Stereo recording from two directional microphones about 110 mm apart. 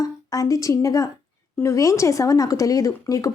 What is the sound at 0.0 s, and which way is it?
A woman's voice, 30° left (ahead or behind).